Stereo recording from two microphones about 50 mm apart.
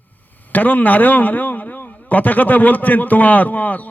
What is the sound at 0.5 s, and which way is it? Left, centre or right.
A man's voice, left.